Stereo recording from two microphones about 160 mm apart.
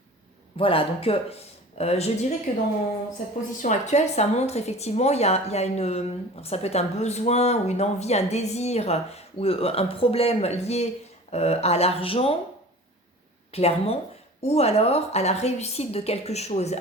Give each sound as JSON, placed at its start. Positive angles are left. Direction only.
{"t": 0.5, "sound": "a woman's voice", "side_deg": 35}
{"t": 2.5, "sound": "a woman's voice", "side_deg": 55}
{"t": 13.5, "sound": "a woman's voice", "side_deg": 40}